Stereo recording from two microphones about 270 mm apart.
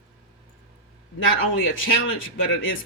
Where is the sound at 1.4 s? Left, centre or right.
Left.